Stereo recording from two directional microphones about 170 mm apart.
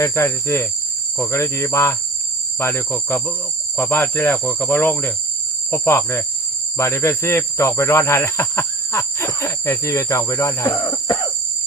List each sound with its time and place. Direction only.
0.0 s cricket: 15° left (ahead or behind)